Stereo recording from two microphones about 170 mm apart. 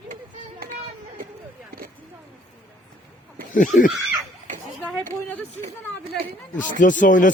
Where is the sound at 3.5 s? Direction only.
50° left (ahead or behind).